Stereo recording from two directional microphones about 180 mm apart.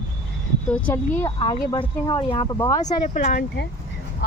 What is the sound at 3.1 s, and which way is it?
Speech, 45° left (ahead or behind).